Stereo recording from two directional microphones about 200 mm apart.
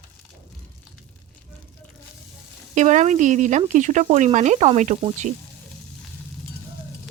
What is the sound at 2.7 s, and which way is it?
Speech, 35° right (ahead or behind).